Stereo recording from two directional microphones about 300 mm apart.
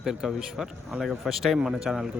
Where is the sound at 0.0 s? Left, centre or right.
Centre.